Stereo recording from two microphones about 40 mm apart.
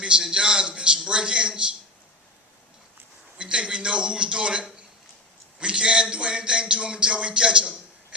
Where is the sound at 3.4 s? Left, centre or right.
Right.